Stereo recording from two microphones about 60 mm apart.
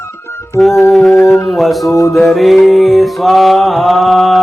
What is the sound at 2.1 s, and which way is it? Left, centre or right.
Music, centre.